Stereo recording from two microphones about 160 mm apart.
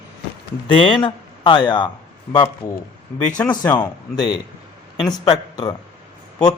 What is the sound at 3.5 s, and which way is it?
A man's voice, 25° left (ahead or behind).